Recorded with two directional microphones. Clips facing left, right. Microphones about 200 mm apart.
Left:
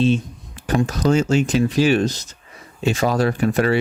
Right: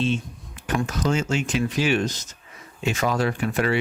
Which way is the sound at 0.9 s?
35° left (ahead or behind).